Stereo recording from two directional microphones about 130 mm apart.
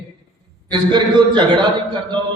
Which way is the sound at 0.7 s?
35° right (ahead or behind).